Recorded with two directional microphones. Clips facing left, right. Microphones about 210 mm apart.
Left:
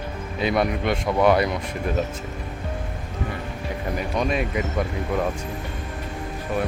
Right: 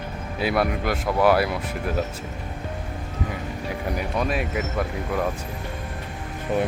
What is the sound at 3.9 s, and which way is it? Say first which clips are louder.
Speech: left 2 dB; 5° right (ahead or behind).